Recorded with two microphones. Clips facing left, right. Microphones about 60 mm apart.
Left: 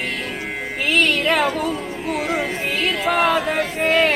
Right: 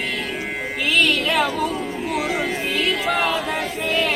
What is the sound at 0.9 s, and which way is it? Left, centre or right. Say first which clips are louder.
Music: left 2 dB; left.